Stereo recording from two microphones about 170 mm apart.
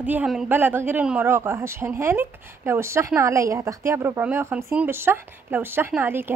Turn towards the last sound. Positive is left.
turn(degrees=-15)  # may be behind; listen again after turning